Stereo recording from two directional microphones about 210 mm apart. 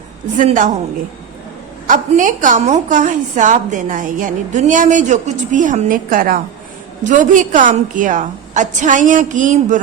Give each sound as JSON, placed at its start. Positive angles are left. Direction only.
{"t": 0.3, "sound": "a woman's voice", "side_deg": -40}
{"t": 1.9, "sound": "a woman's voice", "side_deg": -40}